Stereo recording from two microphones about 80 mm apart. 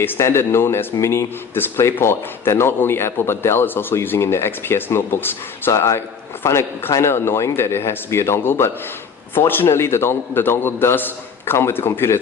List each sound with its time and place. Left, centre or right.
0.2 s speech: left
5.7 s a man's voice: left